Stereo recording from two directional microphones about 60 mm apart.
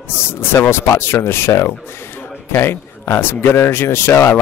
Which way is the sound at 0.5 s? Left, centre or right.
Left.